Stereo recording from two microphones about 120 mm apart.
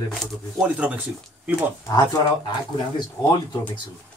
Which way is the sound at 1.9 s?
25° left (ahead or behind).